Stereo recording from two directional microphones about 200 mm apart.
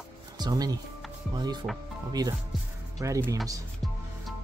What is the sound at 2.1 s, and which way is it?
Speech, 20° right (ahead or behind).